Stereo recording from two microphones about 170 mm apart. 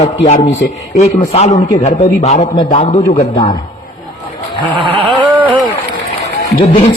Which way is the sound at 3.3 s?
25° left (ahead or behind).